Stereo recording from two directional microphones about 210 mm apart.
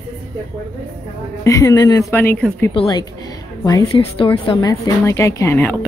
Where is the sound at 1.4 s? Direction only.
15° left (ahead or behind).